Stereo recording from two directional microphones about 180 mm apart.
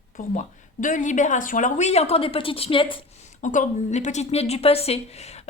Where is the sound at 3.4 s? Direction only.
45° left (ahead or behind).